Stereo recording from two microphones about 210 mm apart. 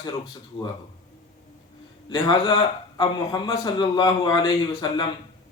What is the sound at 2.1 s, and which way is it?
A man's voice, 20° left (ahead or behind).